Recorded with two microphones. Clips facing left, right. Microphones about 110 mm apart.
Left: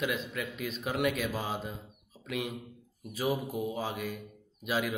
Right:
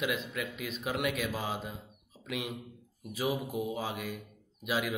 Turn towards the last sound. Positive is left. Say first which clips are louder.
# left 1 dB
turn(degrees=-10)  # may be behind; listen again after turning